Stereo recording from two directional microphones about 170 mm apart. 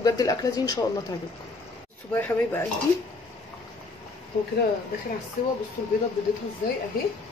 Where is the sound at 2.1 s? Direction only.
10° left (ahead or behind).